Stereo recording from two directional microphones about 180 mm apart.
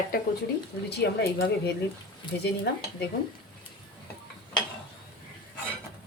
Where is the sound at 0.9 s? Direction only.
65° left (ahead or behind).